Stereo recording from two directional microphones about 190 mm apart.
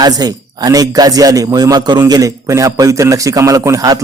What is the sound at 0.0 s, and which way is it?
A man's voice, 20° right (ahead or behind).